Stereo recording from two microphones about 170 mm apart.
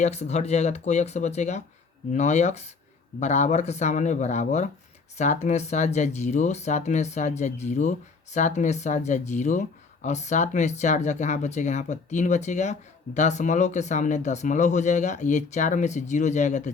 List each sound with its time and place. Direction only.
0.0 s speech: 40° left (ahead or behind)